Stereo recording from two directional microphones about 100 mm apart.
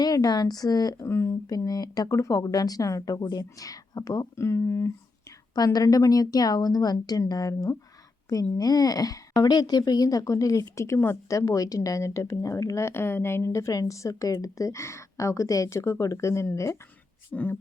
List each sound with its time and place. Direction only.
0.0 s speech: 40° left (ahead or behind)
1.0 s speech: 25° left (ahead or behind)
1.5 s speech: 40° left (ahead or behind)
5.5 s speech: 40° left (ahead or behind)
17.3 s speech: 20° left (ahead or behind)